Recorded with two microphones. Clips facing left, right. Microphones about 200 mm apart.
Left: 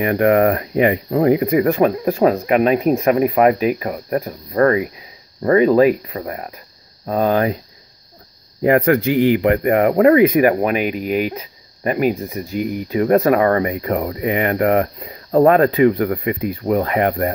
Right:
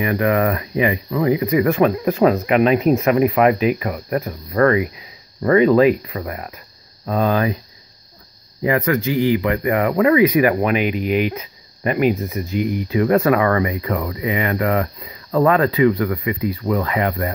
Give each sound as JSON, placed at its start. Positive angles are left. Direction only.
{"t": 0.0, "sound": "speech", "side_deg": 50}
{"t": 1.7, "sound": "speech", "side_deg": 35}
{"t": 8.6, "sound": "speech", "side_deg": 60}